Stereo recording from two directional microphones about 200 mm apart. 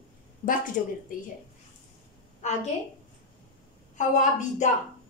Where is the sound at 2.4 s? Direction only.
35° left (ahead or behind).